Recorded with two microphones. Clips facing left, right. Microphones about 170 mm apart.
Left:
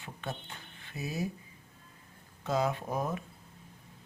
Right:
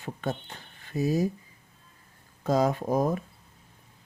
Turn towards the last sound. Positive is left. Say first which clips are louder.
# right 8 dB
turn(degrees=-40)  # may be behind; listen again after turning